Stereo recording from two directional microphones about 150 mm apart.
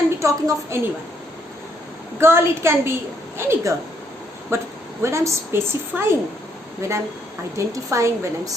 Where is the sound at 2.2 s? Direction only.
15° right (ahead or behind).